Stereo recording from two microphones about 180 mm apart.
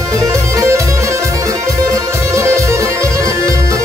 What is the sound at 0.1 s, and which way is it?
Music, 15° right (ahead or behind).